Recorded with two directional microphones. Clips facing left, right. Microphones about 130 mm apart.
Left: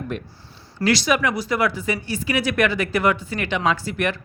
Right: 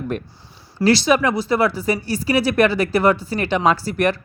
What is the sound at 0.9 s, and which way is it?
Speech, 30° right (ahead or behind).